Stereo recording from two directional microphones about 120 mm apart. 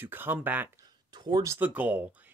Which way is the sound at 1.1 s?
35° right (ahead or behind).